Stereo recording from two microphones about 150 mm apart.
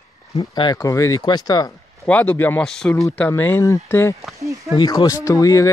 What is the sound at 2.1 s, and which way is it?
Speech, 10° left (ahead or behind).